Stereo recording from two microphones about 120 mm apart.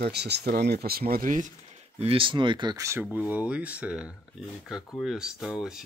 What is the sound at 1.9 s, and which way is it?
Speech, 55° right (ahead or behind).